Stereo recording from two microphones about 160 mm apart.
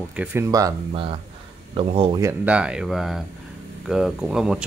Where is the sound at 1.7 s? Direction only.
35° right (ahead or behind).